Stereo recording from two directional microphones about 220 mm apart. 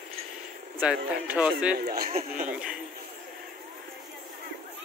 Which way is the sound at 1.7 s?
45° right (ahead or behind).